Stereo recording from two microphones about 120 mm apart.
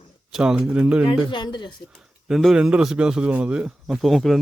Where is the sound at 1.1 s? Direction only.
40° left (ahead or behind).